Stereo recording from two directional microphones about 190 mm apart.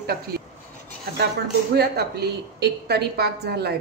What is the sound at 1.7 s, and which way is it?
A woman's voice, 60° right (ahead or behind).